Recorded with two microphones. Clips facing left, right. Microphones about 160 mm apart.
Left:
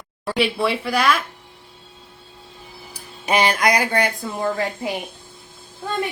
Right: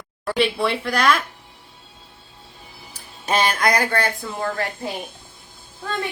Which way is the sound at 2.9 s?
15° left (ahead or behind).